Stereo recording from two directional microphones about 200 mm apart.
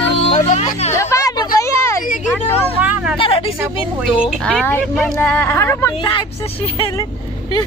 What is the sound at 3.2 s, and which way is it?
Speech, 25° left (ahead or behind).